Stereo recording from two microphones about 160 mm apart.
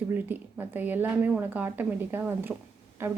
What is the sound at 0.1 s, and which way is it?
A woman's voice, 10° right (ahead or behind).